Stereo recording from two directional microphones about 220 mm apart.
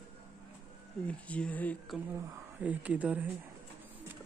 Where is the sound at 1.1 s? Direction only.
5° left (ahead or behind).